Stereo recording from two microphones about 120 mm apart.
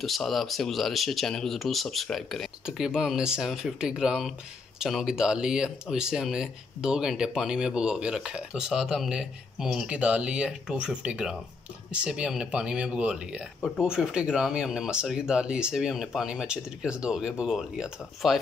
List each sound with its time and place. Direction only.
0.0 s speech: centre (ahead or behind)